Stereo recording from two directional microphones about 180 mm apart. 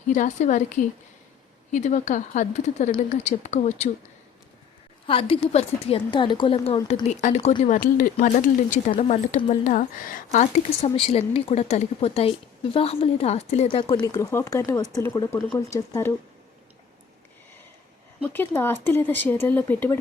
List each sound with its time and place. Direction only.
0.1 s speech: 40° left (ahead or behind)
5.0 s a woman's voice: 30° left (ahead or behind)
7.1 s speech: 40° left (ahead or behind)
8.9 s speech: 35° left (ahead or behind)
10.8 s speech: 30° left (ahead or behind)
13.7 s a woman's voice: 25° left (ahead or behind)
18.2 s speech: 10° left (ahead or behind)